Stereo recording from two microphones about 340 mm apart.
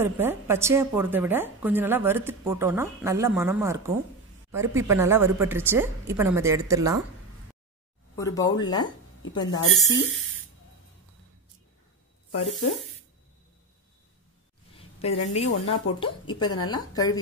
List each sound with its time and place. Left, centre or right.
0.0 s a woman's voice: centre
8.2 s speech: centre
9.5 s speech: left
10.0 s speech: centre
15.0 s a woman's voice: centre